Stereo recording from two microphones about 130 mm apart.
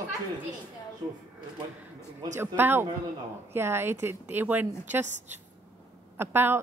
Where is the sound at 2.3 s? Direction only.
15° right (ahead or behind).